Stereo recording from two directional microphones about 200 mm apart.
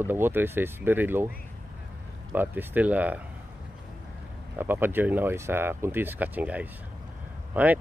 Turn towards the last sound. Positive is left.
turn(degrees=-10)  # may be behind; listen again after turning